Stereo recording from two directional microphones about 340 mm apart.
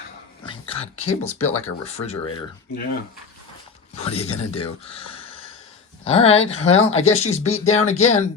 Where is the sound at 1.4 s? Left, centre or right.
Centre.